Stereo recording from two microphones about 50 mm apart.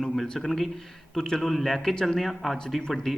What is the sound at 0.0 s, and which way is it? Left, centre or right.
Speech, centre.